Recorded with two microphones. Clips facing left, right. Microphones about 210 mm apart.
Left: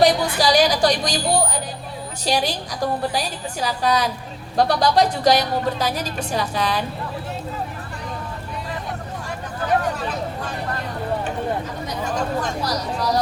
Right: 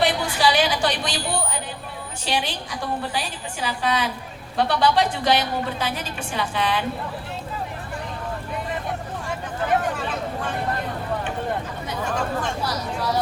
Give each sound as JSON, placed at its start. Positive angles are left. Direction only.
{"t": 0.0, "sound": "a woman's voice", "side_deg": 40}
{"t": 12.4, "sound": "a woman's voice", "side_deg": 40}